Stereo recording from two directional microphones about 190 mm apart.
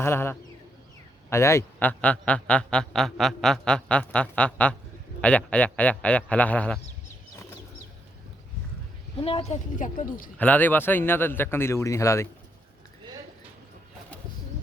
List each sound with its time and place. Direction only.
0.0 s a man's voice: 10° left (ahead or behind)
9.2 s a woman's voice: 35° left (ahead or behind)
10.3 s a man's voice: 10° left (ahead or behind)